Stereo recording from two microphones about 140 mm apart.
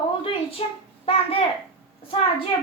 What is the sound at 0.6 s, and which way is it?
Speech, 40° left (ahead or behind).